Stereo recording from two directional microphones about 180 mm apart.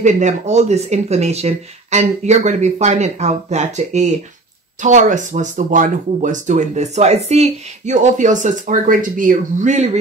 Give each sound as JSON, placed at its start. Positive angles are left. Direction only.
{"t": 0.0, "sound": "speech", "side_deg": -40}